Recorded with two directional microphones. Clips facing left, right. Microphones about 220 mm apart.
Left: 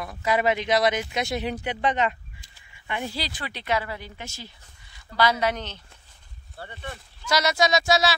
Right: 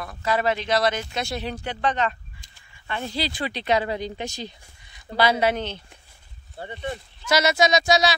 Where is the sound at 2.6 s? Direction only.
15° left (ahead or behind).